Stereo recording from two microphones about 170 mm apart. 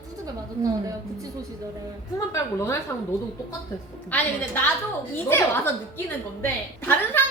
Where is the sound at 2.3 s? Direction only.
15° left (ahead or behind).